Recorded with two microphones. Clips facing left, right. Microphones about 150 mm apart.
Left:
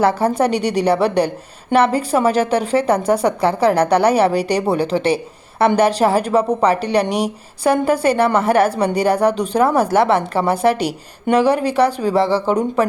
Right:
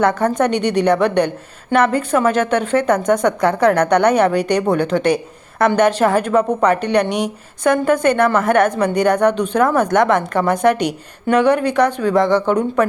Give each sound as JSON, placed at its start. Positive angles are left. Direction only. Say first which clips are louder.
{"t": 0.0, "sound": "a woman's voice", "louder": "even", "side_deg": 30}